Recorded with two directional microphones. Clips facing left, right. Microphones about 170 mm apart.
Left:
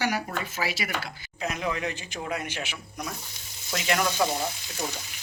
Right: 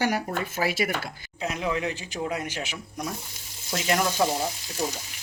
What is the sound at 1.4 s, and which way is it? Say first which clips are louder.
Speech: right 2 dB; 30° right (ahead or behind).